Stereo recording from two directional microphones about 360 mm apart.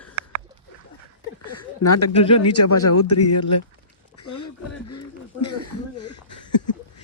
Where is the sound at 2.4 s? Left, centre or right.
Left.